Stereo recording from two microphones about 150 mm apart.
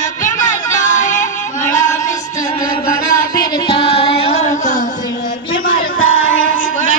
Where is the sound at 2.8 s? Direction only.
70° left (ahead or behind).